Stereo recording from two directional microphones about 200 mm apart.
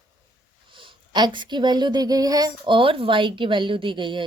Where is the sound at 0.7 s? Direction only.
25° right (ahead or behind).